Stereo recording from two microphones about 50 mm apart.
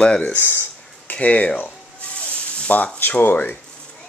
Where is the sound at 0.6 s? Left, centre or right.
Left.